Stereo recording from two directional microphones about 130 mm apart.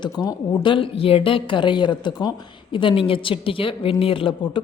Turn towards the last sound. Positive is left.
turn(degrees=40)  # may be behind; listen again after turning